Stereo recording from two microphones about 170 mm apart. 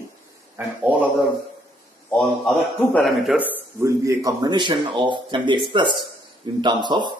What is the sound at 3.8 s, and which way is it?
Speech, 20° right (ahead or behind).